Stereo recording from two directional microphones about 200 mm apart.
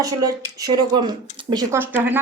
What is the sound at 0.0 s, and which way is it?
Speech, 15° right (ahead or behind).